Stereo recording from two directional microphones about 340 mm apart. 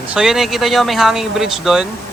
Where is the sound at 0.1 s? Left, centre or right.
Centre.